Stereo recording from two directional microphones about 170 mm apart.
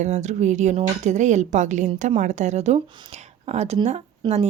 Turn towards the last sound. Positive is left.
turn(degrees=-25)  # may be behind; listen again after turning